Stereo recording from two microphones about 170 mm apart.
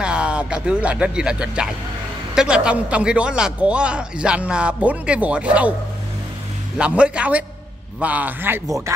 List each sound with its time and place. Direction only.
0.0 s a man's voice: 5° right (ahead or behind)
6.8 s speech: 5° right (ahead or behind)